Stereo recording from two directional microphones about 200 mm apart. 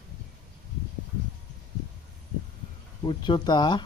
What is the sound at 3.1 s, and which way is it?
Speech, 25° left (ahead or behind).